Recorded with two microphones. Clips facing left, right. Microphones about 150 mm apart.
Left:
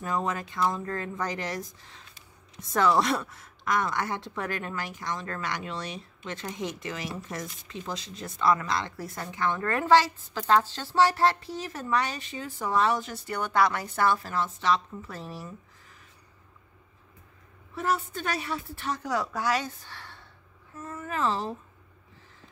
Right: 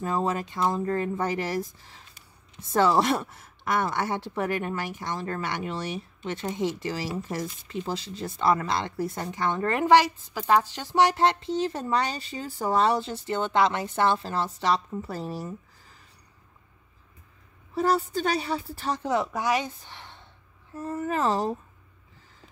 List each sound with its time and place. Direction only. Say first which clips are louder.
0.0 s a woman's voice: right 3 dB; 30° right (ahead or behind)
2.7 s a woman's voice: right 2 dB; 30° right (ahead or behind)
17.7 s a woman's voice: right 5 dB; 35° right (ahead or behind)
20.7 s speech: right 6 dB; 35° right (ahead or behind)